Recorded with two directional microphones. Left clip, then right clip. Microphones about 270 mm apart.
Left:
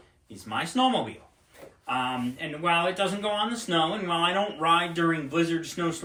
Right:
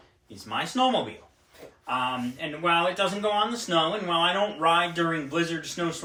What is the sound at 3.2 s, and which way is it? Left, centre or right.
Speech, centre.